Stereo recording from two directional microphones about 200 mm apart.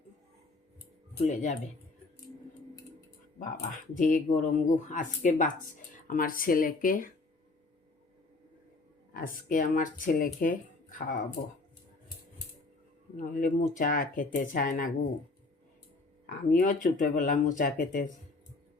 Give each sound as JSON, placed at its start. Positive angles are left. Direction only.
{"t": 1.2, "sound": "speech", "side_deg": 35}
{"t": 3.4, "sound": "speech", "side_deg": 40}
{"t": 9.1, "sound": "speech", "side_deg": 45}
{"t": 13.1, "sound": "speech", "side_deg": 40}
{"t": 16.5, "sound": "speech", "side_deg": 45}